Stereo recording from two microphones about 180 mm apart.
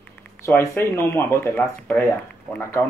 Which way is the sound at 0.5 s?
15° left (ahead or behind).